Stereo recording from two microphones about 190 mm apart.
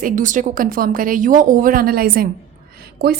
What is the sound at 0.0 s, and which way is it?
A woman's voice, 40° right (ahead or behind).